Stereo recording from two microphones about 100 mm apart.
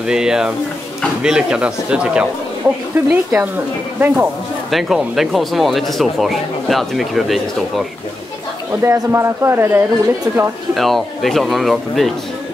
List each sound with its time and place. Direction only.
0.0 s speech: 5° right (ahead or behind)
4.6 s speech: centre (ahead or behind)
8.8 s speech: 25° right (ahead or behind)
10.8 s speech: centre (ahead or behind)